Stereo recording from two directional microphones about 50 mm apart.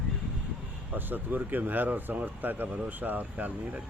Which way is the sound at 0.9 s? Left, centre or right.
Right.